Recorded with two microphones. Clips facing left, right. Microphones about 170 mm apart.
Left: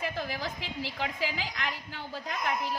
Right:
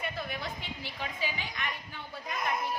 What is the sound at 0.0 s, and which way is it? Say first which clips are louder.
A woman's voice: left 3 dB; 90° left.